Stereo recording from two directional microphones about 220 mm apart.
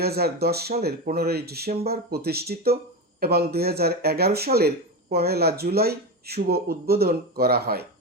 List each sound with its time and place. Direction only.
0.0 s speech: 45° right (ahead or behind)